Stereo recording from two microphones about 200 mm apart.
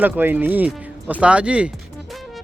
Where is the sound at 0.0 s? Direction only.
10° right (ahead or behind).